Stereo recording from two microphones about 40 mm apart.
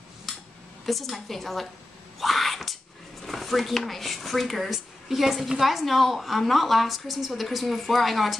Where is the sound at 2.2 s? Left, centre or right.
Centre.